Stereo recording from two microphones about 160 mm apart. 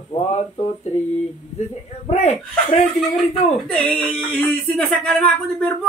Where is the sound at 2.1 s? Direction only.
40° left (ahead or behind).